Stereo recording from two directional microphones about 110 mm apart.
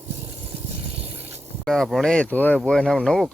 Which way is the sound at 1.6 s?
5° left (ahead or behind).